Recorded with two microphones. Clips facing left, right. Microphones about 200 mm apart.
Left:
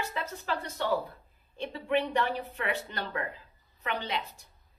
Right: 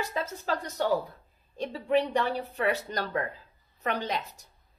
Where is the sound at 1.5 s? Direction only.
40° right (ahead or behind).